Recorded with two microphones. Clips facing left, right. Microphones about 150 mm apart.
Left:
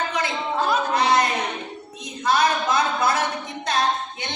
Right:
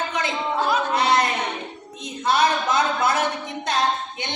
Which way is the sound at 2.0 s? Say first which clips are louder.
Even; 25° right (ahead or behind).